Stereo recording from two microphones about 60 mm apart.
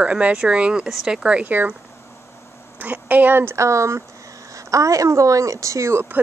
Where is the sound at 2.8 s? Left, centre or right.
Right.